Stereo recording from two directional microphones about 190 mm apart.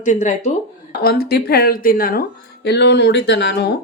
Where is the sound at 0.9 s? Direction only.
55° left (ahead or behind).